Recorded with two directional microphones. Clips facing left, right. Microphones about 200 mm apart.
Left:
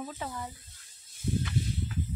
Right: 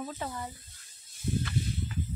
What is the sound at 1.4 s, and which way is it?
Snake, 10° left (ahead or behind).